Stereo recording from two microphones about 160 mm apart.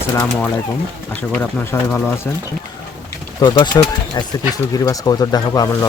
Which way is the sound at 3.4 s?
25° left (ahead or behind).